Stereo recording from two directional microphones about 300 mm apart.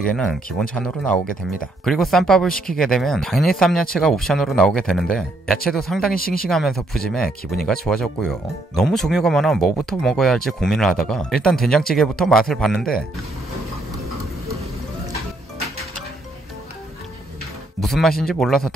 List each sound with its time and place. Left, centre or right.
0.1 s speech: centre
6.1 s speech: left
6.5 s speech: centre
17.7 s speech: centre